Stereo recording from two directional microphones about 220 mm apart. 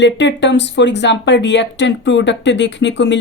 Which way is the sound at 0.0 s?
55° left (ahead or behind).